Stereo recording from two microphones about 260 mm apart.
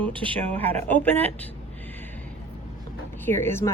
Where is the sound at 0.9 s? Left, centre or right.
Centre.